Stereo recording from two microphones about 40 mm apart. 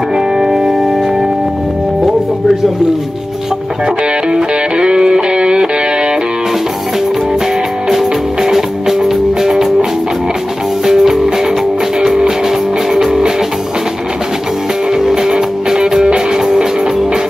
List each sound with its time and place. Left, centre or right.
0.1 s music: centre
3.8 s music: centre
7.9 s music: centre
10.9 s music: centre
14.9 s music: centre